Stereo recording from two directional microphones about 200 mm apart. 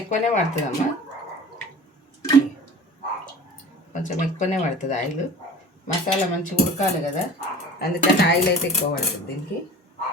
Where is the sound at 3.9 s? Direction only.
40° left (ahead or behind).